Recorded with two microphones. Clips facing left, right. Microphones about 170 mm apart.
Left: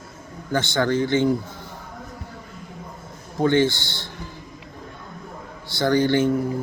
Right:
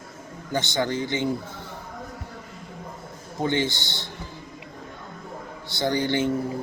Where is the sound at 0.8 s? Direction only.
15° right (ahead or behind).